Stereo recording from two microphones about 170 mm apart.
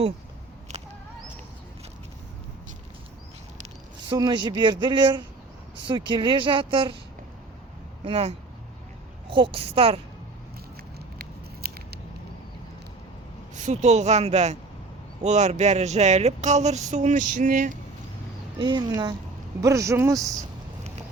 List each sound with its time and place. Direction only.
0.7 s a sound: 40° right (ahead or behind)
4.1 s speech: 25° right (ahead or behind)
8.0 s speech: 35° right (ahead or behind)
11.2 s scissors: 65° right (ahead or behind)
13.7 s speech: 40° right (ahead or behind)
18.6 s speech: 25° right (ahead or behind)